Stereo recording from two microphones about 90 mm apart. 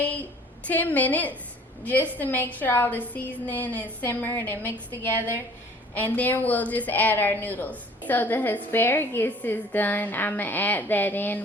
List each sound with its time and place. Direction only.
0.7 s a woman's voice: 20° left (ahead or behind)